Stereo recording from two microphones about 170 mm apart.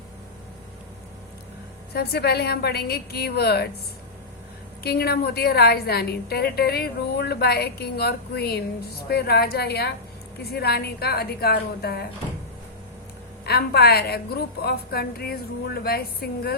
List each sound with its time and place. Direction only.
1.9 s a woman's voice: 70° left (ahead or behind)
4.8 s a woman's voice: 65° left (ahead or behind)
13.4 s a woman's voice: 65° left (ahead or behind)